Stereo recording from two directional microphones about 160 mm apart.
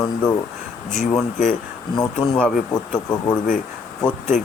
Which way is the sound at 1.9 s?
25° left (ahead or behind).